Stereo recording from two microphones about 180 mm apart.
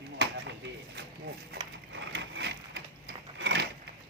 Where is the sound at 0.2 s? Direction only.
80° right.